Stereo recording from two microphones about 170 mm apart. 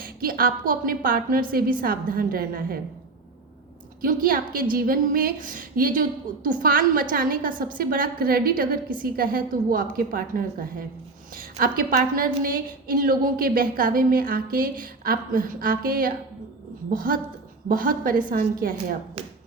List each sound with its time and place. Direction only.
0.0 s a woman's voice: 55° right (ahead or behind)
4.0 s a woman's voice: 55° right (ahead or behind)